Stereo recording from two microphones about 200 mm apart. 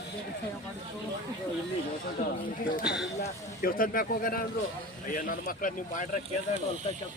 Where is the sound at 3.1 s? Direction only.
40° left (ahead or behind).